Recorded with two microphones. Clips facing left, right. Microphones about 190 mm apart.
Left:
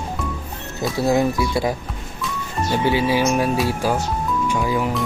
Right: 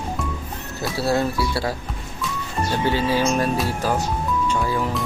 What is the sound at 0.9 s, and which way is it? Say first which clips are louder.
Speech: left 3 dB; 15° left (ahead or behind).